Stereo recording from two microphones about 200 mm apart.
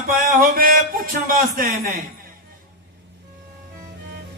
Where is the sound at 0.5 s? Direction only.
45° right (ahead or behind).